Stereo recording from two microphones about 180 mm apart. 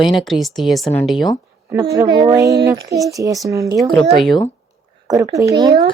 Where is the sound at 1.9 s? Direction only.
25° right (ahead or behind).